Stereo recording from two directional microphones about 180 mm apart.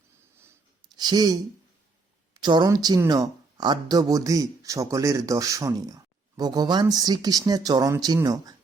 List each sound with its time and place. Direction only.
0.9 s speech: 20° right (ahead or behind)